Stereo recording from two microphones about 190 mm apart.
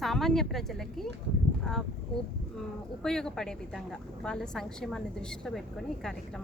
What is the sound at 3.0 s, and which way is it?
A woman's voice, centre (ahead or behind).